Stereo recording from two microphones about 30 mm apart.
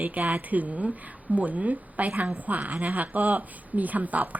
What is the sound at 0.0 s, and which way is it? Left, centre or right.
A woman's voice, right.